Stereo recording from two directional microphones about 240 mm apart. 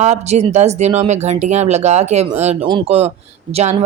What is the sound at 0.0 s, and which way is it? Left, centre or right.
Speech, right.